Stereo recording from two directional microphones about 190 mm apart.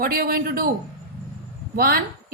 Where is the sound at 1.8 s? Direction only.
50° right (ahead or behind).